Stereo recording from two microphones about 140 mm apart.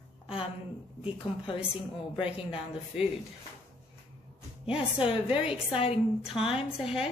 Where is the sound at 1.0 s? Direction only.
40° left (ahead or behind).